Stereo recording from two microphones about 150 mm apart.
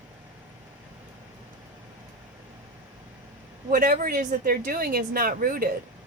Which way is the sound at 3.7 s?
70° right (ahead or behind).